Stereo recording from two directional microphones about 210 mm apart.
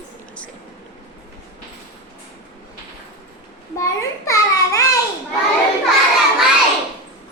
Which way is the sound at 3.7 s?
15° left (ahead or behind).